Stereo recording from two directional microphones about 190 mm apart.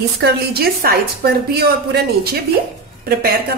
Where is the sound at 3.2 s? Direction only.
55° right (ahead or behind).